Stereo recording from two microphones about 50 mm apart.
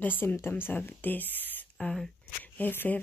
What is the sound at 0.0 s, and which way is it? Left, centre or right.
Speech, left.